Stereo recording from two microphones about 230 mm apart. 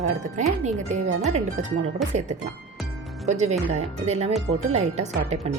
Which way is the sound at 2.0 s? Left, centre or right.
Centre.